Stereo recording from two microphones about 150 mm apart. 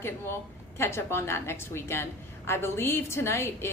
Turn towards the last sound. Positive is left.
turn(degrees=15)  # may be behind; listen again after turning